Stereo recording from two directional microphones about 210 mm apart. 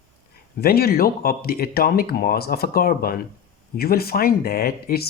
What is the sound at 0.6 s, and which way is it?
Speech, 45° left (ahead or behind).